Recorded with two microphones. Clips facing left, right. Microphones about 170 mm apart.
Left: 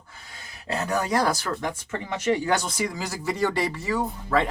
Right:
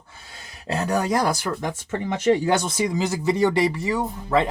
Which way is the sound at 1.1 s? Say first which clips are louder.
Right 1 dB; 15° right (ahead or behind).